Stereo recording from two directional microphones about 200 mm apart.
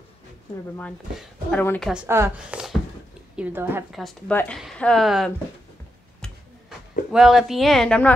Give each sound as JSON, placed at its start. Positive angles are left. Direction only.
{"t": 1.1, "sound": "speech", "side_deg": 0}
{"t": 1.6, "sound": "speech", "side_deg": 10}
{"t": 1.9, "sound": "a woman's voice", "side_deg": -10}
{"t": 4.0, "sound": "speech", "side_deg": 5}
{"t": 6.2, "sound": "tick-tock", "side_deg": 5}
{"t": 7.1, "sound": "speech", "side_deg": 0}